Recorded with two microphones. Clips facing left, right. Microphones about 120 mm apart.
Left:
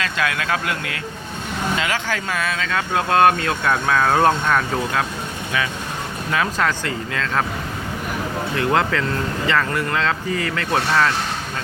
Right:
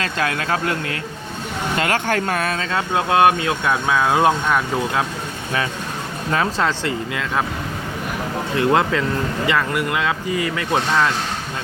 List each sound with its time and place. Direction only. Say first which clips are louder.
0.0 s speech: right 1 dB; 35° right (ahead or behind)
1.8 s speech: right 4 dB; 50° right (ahead or behind)
2.6 s speech: right 1 dB; 25° right (ahead or behind); by 5.0 s 10° right (ahead or behind)
6.3 s speech: right 1 dB; 25° right (ahead or behind)
8.5 s speech: right 3 dB; 20° right (ahead or behind)